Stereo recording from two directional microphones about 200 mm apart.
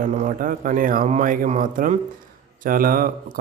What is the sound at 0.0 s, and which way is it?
Speech, 40° right (ahead or behind).